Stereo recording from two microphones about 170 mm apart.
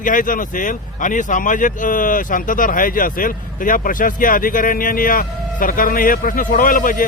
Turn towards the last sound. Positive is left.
turn(degrees=55)  # may be behind; listen again after turning